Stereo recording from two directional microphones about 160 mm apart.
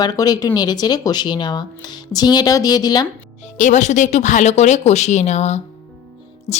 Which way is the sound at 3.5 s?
50° left (ahead or behind).